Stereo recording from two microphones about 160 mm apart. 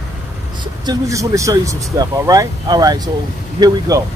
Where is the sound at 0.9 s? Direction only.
20° right (ahead or behind).